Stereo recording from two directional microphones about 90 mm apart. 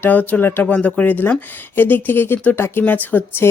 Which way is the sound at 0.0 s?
20° left (ahead or behind).